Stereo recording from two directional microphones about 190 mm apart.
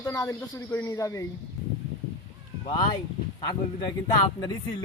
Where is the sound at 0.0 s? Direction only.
15° left (ahead or behind).